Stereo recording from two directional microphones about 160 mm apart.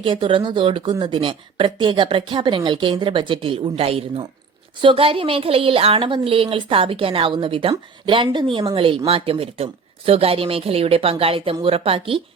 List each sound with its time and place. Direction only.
0.0 s speech: 30° right (ahead or behind)